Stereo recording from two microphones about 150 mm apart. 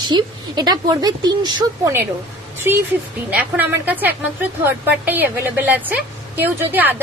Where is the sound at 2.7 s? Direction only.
15° right (ahead or behind).